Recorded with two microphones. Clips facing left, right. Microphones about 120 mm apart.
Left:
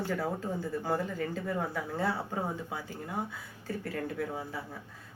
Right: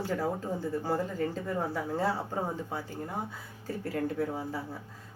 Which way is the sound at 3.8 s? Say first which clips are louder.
Right 5 dB; 30° right (ahead or behind).